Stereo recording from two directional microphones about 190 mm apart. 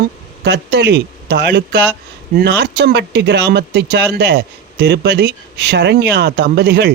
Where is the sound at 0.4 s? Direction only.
60° right (ahead or behind).